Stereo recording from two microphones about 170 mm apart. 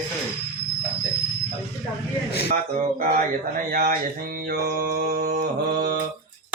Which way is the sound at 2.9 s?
60° right (ahead or behind).